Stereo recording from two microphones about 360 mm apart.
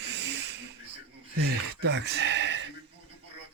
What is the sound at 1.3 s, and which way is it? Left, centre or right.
Speech, right.